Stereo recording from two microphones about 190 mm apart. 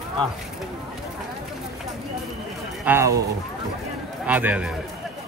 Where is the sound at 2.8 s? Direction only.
10° right (ahead or behind).